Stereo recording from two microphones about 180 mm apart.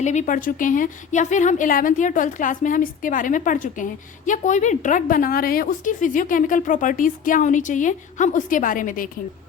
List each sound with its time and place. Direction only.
0.0 s a woman's voice: 40° left (ahead or behind)